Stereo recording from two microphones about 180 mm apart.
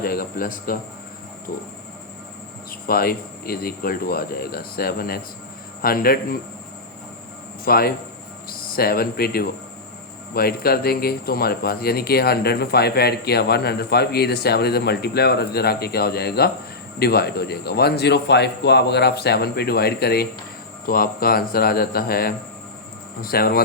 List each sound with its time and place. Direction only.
0.0 s speech: 55° left (ahead or behind)
2.8 s speech: 55° left (ahead or behind)
7.6 s speech: 55° left (ahead or behind)